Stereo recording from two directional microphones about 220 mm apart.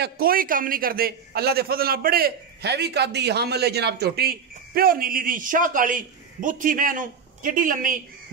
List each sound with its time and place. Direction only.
0.0 s a man's voice: 40° right (ahead or behind)